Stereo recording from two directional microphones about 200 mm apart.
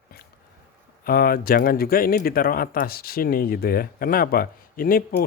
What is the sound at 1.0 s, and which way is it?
Speech, 50° left (ahead or behind).